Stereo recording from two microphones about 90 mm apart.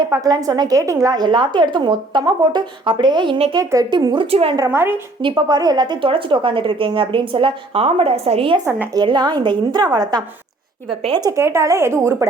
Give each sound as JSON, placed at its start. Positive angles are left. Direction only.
{"t": 0.1, "sound": "a woman's voice", "side_deg": -40}
{"t": 3.6, "sound": "a woman's voice", "side_deg": -35}
{"t": 4.1, "sound": "speech", "side_deg": -80}
{"t": 4.7, "sound": "a woman's voice", "side_deg": -25}
{"t": 5.2, "sound": "a woman's voice", "side_deg": -55}
{"t": 6.0, "sound": "a woman's voice", "side_deg": -75}
{"t": 9.0, "sound": "a woman's voice", "side_deg": -55}
{"t": 11.3, "sound": "a woman's voice", "side_deg": -30}